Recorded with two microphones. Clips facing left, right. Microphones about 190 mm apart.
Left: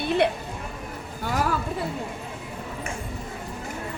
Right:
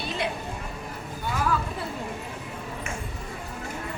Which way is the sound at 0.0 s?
60° left (ahead or behind).